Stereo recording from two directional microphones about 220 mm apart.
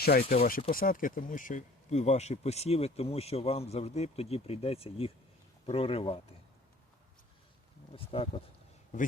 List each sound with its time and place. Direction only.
0.0 s speech: 45° left (ahead or behind); by 6.1 s 25° left (ahead or behind)
7.9 s speech: 25° left (ahead or behind)